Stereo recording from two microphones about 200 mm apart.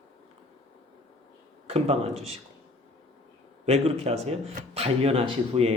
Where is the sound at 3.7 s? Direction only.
30° right (ahead or behind).